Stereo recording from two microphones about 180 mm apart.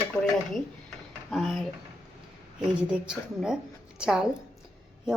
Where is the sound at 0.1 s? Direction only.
20° left (ahead or behind).